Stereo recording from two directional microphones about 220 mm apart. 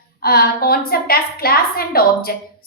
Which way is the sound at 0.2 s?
45° left (ahead or behind).